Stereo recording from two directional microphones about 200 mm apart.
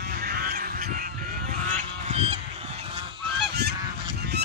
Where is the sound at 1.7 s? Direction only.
35° right (ahead or behind).